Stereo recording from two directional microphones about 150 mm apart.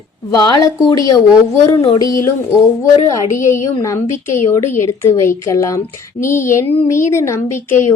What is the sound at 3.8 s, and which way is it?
A woman's voice, 20° left (ahead or behind).